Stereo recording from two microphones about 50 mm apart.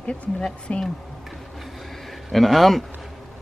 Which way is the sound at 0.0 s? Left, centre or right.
Left.